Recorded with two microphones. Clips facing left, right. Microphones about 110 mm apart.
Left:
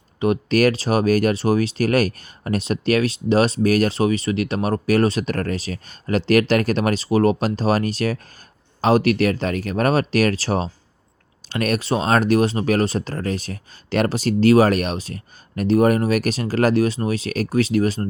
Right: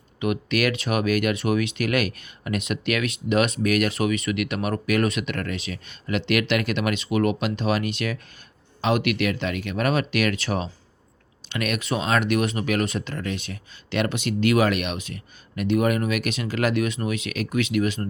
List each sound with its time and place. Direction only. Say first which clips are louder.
0.2 s speech: left 6 dB; 35° left (ahead or behind)